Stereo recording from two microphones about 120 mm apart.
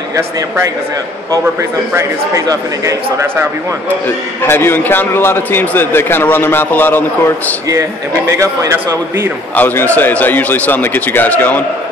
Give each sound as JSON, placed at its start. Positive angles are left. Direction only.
{"t": 2.0, "sound": "speech", "side_deg": -25}
{"t": 4.4, "sound": "a man's voice", "side_deg": 20}
{"t": 8.3, "sound": "speech", "side_deg": -20}
{"t": 9.6, "sound": "a man's voice", "side_deg": 15}